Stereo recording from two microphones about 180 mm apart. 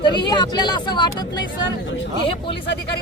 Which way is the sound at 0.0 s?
25° left (ahead or behind).